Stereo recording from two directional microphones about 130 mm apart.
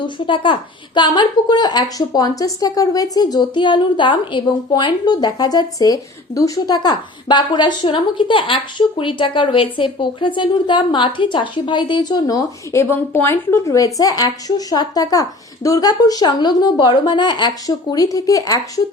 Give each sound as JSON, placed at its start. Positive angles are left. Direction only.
{"t": 0.0, "sound": "speech", "side_deg": 40}